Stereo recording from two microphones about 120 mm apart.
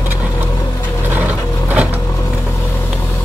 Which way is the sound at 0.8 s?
20° left (ahead or behind).